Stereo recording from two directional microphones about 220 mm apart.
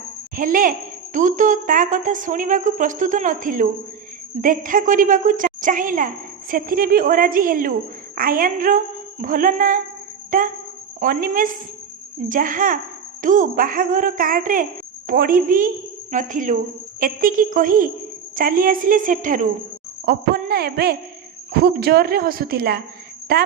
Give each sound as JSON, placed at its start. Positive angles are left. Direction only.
{"t": 0.3, "sound": "speech", "side_deg": -40}